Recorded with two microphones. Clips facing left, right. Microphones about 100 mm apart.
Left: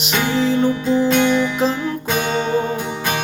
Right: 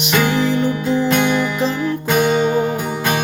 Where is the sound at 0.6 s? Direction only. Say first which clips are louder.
Left 1 dB; 5° right (ahead or behind).